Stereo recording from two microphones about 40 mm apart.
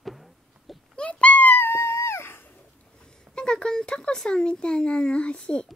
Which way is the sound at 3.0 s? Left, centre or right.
Left.